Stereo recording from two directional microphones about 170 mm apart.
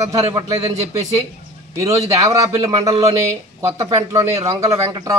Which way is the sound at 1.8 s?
20° right (ahead or behind).